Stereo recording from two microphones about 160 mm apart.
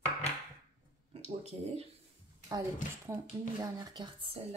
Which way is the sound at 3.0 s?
20° right (ahead or behind).